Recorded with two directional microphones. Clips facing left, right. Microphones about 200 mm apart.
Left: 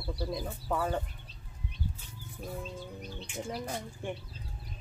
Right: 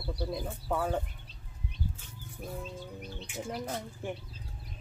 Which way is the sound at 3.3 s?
5° right (ahead or behind).